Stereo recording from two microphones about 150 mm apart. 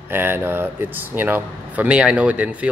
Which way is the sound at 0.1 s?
15° right (ahead or behind).